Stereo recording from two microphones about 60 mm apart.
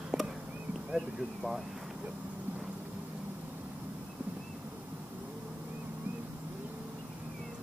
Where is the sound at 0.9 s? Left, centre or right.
Centre.